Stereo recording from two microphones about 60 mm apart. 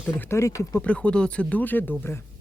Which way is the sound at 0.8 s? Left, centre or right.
Left.